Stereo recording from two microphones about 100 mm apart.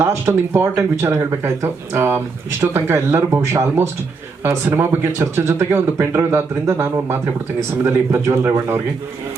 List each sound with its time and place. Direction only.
0.0 s speech: 25° right (ahead or behind)